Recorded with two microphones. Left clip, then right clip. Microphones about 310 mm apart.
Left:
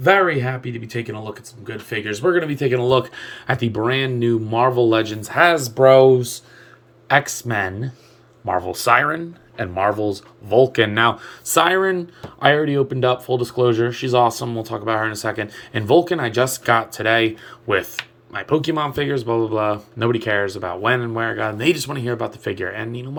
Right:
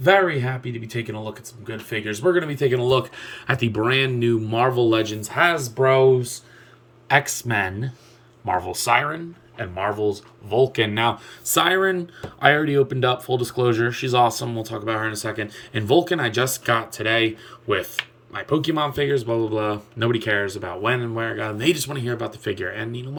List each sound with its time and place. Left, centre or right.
0.0 s speech: centre; by 6.1 s left
7.1 s speech: centre